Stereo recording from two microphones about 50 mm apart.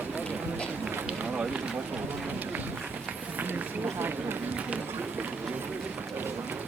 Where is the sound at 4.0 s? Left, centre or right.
Right.